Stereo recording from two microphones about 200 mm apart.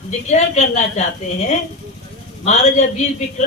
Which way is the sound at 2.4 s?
35° left (ahead or behind).